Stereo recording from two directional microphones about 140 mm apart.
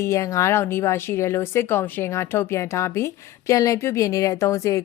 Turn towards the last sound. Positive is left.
turn(degrees=20)  # may be behind; listen again after turning